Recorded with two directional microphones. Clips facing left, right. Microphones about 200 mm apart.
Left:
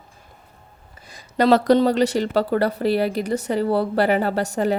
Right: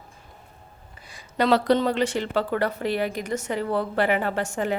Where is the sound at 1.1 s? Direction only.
40° left (ahead or behind).